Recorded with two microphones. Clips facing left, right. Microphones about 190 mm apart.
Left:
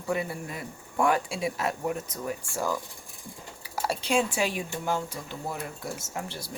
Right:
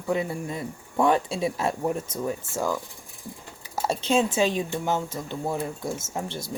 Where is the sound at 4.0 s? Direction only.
25° right (ahead or behind).